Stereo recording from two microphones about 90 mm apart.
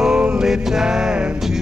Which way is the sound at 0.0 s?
5° right (ahead or behind).